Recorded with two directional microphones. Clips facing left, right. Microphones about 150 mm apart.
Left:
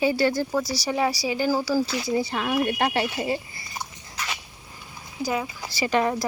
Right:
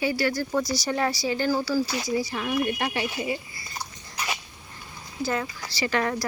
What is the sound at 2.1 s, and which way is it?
Speech, 30° left (ahead or behind).